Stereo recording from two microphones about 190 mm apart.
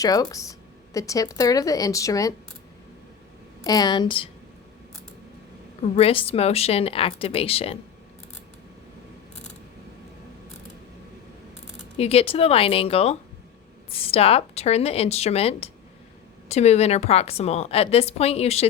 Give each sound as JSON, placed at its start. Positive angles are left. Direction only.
{"t": 0.0, "sound": "a woman's voice", "side_deg": 20}
{"t": 3.6, "sound": "a woman's voice", "side_deg": 20}
{"t": 5.8, "sound": "a woman's voice", "side_deg": 30}
{"t": 11.8, "sound": "a woman's voice", "side_deg": 30}